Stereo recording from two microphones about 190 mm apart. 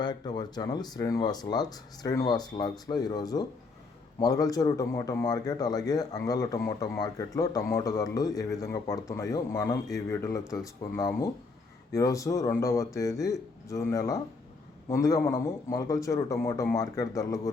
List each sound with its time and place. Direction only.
0.0 s a man's voice: 20° left (ahead or behind)